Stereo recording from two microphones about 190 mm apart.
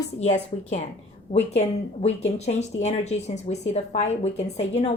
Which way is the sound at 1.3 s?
35° left (ahead or behind).